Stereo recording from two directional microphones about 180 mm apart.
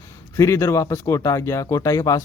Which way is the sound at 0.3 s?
15° left (ahead or behind).